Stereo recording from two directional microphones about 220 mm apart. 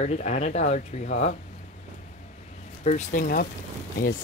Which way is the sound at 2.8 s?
35° left (ahead or behind).